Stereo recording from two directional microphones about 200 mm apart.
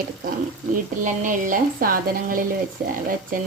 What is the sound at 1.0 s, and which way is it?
A woman's voice, 40° right (ahead or behind).